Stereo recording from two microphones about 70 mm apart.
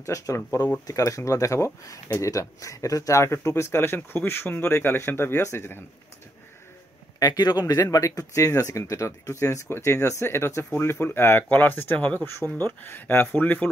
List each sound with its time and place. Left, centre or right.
0.0 s speech: left
7.2 s speech: left